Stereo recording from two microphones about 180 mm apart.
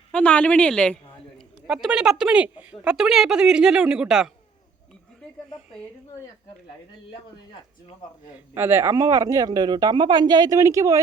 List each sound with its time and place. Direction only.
0.1 s a woman's voice: 5° left (ahead or behind)
8.5 s a man's voice: 10° right (ahead or behind)